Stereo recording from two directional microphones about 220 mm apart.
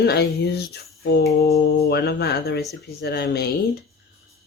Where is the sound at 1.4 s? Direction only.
45° left (ahead or behind).